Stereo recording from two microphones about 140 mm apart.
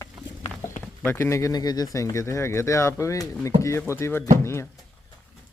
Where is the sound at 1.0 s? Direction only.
20° left (ahead or behind).